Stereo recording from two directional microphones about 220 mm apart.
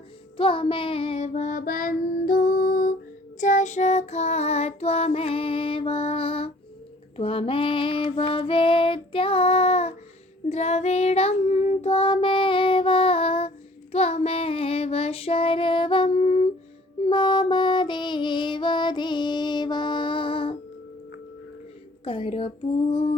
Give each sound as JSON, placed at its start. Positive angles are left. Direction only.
{"t": 0.3, "sound": "child singing", "side_deg": 25}
{"t": 7.2, "sound": "female singing", "side_deg": 25}
{"t": 10.5, "sound": "child singing", "side_deg": 30}
{"t": 17.1, "sound": "music", "side_deg": 20}
{"t": 22.0, "sound": "speech", "side_deg": 25}
{"t": 22.9, "sound": "female singing", "side_deg": 25}